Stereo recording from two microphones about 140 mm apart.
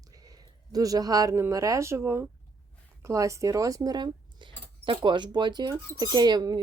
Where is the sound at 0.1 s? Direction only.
25° right (ahead or behind).